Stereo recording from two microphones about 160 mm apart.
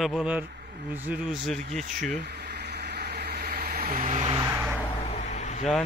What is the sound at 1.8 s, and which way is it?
Speech, 55° right (ahead or behind).